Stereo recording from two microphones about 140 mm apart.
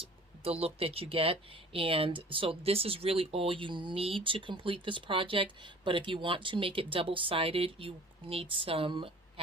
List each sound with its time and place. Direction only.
0.6 s speech: 45° right (ahead or behind)